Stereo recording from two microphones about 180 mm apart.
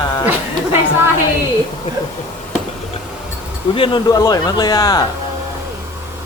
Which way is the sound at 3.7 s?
25° left (ahead or behind).